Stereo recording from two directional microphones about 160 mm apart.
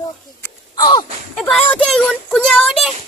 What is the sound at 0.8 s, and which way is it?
Wheeze, 30° left (ahead or behind).